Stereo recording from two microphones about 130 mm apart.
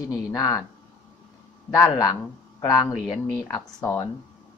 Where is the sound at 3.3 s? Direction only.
25° left (ahead or behind).